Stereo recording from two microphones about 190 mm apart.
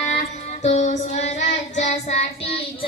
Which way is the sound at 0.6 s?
35° left (ahead or behind).